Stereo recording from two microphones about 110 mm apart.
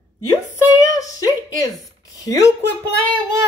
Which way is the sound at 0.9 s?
30° left (ahead or behind).